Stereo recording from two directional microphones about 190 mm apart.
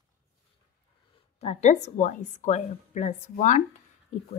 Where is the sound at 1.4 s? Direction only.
35° left (ahead or behind).